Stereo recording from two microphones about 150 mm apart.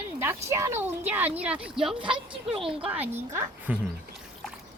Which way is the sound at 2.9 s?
10° right (ahead or behind).